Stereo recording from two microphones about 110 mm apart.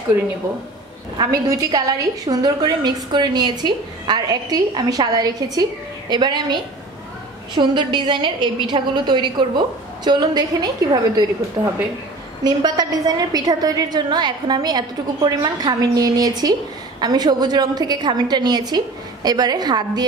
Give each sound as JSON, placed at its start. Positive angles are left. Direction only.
{"t": 1.1, "sound": "a woman's voice", "side_deg": -35}
{"t": 11.6, "sound": "speech", "side_deg": -25}
{"t": 12.4, "sound": "a woman's voice", "side_deg": -40}